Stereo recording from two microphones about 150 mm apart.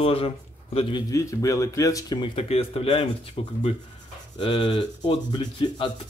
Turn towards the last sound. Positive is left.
turn(degrees=30)  # may be behind; listen again after turning